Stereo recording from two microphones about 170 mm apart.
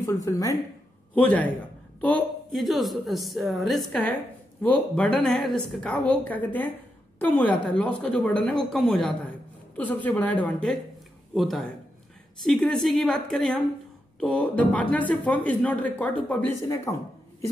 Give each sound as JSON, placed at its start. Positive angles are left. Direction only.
{"t": 0.0, "sound": "a woman's voice", "side_deg": 20}
{"t": 1.1, "sound": "a woman's voice", "side_deg": 10}